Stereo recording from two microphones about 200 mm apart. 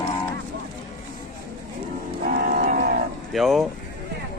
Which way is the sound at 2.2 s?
45° right (ahead or behind).